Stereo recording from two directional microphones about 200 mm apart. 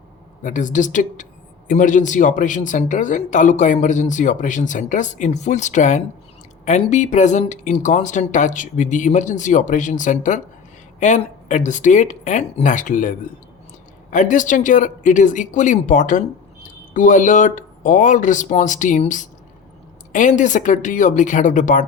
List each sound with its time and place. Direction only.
0.4 s speech: 40° left (ahead or behind)